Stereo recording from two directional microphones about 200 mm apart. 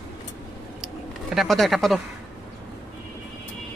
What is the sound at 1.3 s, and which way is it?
Speech, centre (ahead or behind).